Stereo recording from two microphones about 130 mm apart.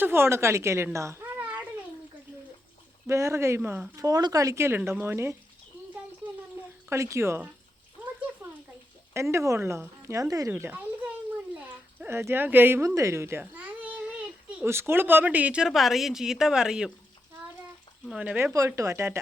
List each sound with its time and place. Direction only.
0.0 s speech: 15° right (ahead or behind)
0.9 s babbling: 20° right (ahead or behind)
3.1 s speech: 20° right (ahead or behind)
6.9 s speech: 20° right (ahead or behind)
9.1 s speech: 20° right (ahead or behind)
10.5 s a child's voice: 15° right (ahead or behind)
18.1 s speech: 10° right (ahead or behind)
18.5 s speech: 25° right (ahead or behind)